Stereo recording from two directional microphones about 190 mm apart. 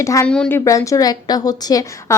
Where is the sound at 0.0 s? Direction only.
15° left (ahead or behind).